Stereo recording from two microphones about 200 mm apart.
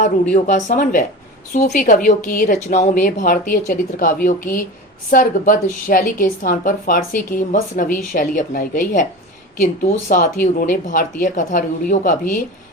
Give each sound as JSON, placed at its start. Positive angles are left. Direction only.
{"t": 0.3, "sound": "a woman's voice", "side_deg": 35}